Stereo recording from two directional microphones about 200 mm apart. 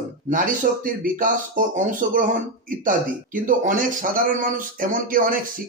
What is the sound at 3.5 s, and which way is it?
A man's voice, 40° right (ahead or behind).